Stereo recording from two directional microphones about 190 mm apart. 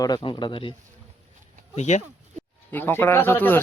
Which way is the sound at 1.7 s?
35° left (ahead or behind).